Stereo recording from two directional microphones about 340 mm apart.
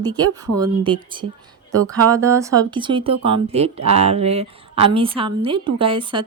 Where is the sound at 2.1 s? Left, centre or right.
Centre.